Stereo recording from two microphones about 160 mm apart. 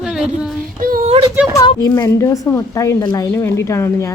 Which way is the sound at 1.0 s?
35° right (ahead or behind).